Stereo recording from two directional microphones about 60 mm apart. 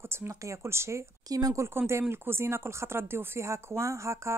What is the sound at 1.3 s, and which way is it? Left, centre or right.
Speech, right.